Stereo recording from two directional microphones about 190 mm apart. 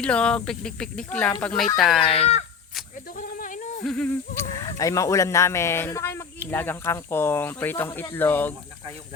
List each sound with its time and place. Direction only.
0.0 s speech: 5° left (ahead or behind)
2.0 s speech: 35° left (ahead or behind)
3.2 s goat: 45° left (ahead or behind)
3.8 s speech: 5° left (ahead or behind)